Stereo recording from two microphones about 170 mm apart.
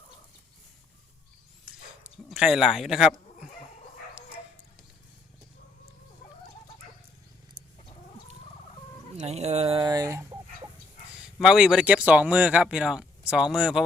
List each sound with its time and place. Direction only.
2.3 s speech: 5° right (ahead or behind)
9.1 s speech: 40° right (ahead or behind)
9.8 s chicken: 20° right (ahead or behind)
11.2 s speech: centre (ahead or behind)